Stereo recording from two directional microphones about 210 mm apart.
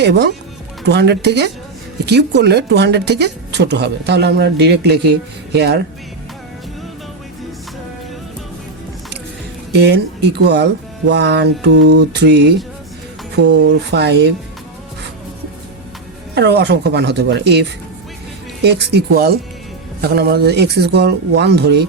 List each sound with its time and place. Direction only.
0.0 s a woman's voice: 55° right (ahead or behind)
9.7 s a woman's voice: 50° right (ahead or behind)
16.3 s a woman's voice: 55° right (ahead or behind)